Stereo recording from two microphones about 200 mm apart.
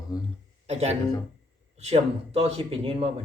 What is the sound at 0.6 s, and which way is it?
Speech, 30° right (ahead or behind).